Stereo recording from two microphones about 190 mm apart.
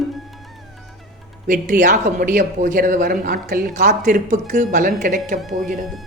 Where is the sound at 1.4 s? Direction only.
40° right (ahead or behind).